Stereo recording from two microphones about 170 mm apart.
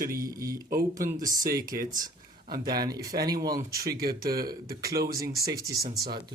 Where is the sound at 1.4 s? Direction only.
60° right (ahead or behind).